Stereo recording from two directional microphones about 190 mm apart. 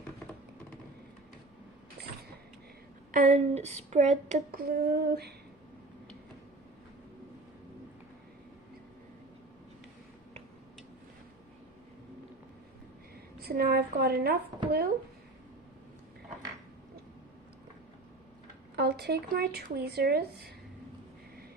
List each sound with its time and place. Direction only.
3.1 s speech: 45° right (ahead or behind)
3.8 s a sound: 40° right (ahead or behind); by 5.3 s 55° right (ahead or behind)
13.4 s speech: 55° right (ahead or behind)
18.8 s speech: 60° right (ahead or behind)